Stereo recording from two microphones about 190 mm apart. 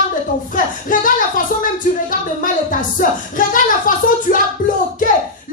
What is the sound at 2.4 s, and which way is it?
Music, 45° left (ahead or behind).